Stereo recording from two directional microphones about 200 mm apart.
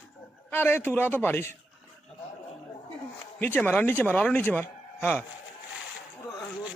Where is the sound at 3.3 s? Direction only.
10° left (ahead or behind).